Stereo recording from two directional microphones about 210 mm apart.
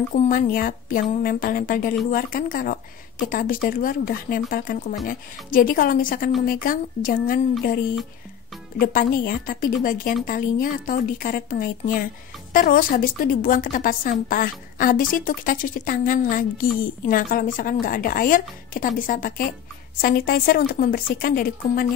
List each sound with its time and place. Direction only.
0.1 s a woman's voice: 40° left (ahead or behind)
8.7 s a woman's voice: 45° left (ahead or behind)